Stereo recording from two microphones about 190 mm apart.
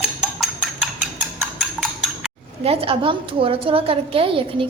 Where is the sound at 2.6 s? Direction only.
30° right (ahead or behind).